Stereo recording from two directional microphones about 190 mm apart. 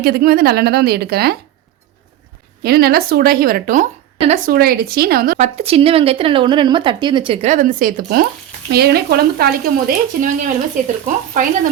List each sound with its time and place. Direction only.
0.0 s speech: 55° right (ahead or behind)
2.6 s speech: 55° right (ahead or behind)
5.4 s a woman's voice: 35° right (ahead or behind)
7.4 s speech: 40° right (ahead or behind)